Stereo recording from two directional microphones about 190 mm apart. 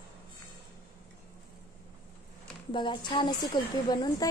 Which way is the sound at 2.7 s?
25° left (ahead or behind).